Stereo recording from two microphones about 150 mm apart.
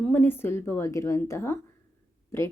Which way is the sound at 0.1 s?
15° left (ahead or behind).